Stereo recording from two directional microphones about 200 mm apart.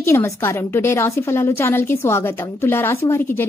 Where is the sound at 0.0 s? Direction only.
10° left (ahead or behind).